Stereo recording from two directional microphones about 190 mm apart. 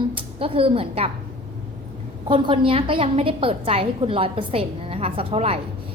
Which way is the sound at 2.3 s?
25° right (ahead or behind).